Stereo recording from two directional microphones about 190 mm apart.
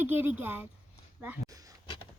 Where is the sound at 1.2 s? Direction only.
15° right (ahead or behind).